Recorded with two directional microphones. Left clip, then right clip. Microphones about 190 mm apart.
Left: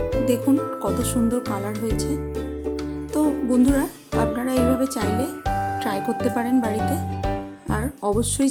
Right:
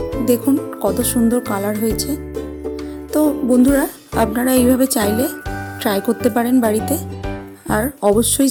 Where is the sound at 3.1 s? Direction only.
25° right (ahead or behind).